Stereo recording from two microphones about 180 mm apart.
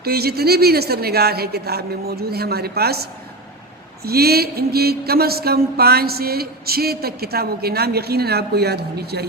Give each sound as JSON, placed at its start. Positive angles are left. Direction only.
{"t": 0.0, "sound": "mantra", "side_deg": -60}